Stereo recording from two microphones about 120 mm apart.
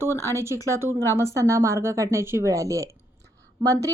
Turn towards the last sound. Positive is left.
turn(degrees=-30)  # may be behind; listen again after turning